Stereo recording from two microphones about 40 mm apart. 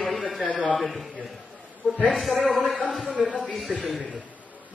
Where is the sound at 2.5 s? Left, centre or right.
Centre.